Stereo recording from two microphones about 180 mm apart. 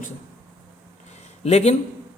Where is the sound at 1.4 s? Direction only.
35° left (ahead or behind).